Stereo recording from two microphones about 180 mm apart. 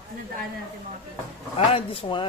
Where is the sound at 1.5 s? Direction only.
30° left (ahead or behind).